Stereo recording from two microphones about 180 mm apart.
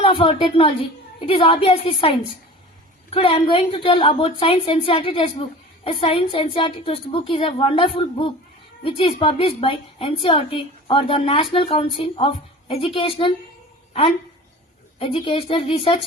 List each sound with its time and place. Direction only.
0.0 s a woman's voice: 30° left (ahead or behind)
14.9 s a woman's voice: 30° left (ahead or behind)